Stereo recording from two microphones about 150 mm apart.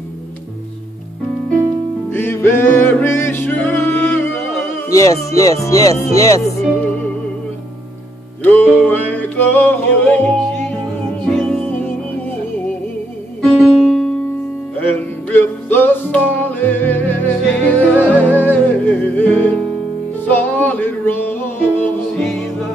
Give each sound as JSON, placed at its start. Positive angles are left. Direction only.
{"t": 2.0, "sound": "music", "side_deg": 15}
{"t": 4.9, "sound": "speech", "side_deg": 20}
{"t": 6.6, "sound": "music", "side_deg": 10}
{"t": 8.4, "sound": "music", "side_deg": 10}
{"t": 14.9, "sound": "music", "side_deg": 10}